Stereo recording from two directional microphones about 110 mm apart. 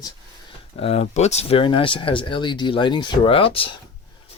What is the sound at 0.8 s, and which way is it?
Speech, 65° left (ahead or behind).